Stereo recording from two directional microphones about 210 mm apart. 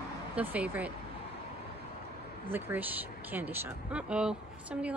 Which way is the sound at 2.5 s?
10° right (ahead or behind).